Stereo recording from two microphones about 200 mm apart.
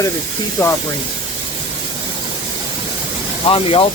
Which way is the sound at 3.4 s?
25° left (ahead or behind).